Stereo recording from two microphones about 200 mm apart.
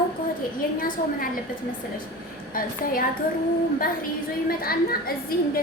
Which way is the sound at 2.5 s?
45° left (ahead or behind).